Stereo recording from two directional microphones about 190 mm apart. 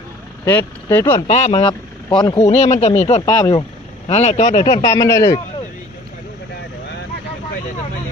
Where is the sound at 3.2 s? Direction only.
20° left (ahead or behind).